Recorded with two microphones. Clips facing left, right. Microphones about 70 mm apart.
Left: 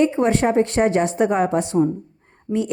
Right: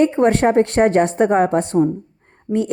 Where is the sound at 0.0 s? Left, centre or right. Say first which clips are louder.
Right 3 dB; right.